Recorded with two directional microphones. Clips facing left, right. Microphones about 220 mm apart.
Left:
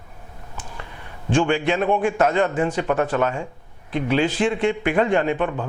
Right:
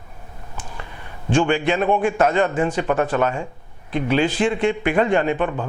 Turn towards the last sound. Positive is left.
turn(degrees=-20)  # may be behind; listen again after turning